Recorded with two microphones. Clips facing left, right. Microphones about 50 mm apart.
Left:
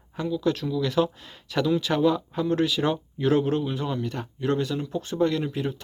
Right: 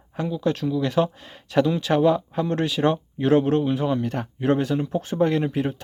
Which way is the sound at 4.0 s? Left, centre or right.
Right.